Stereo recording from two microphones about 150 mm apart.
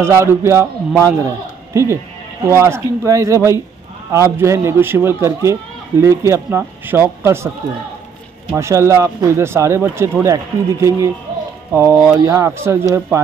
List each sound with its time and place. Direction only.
0.0 s a man's voice: 15° right (ahead or behind)
8.5 s a man's voice: 20° right (ahead or behind)